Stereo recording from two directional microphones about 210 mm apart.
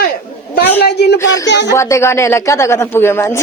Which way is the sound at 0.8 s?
50° left (ahead or behind).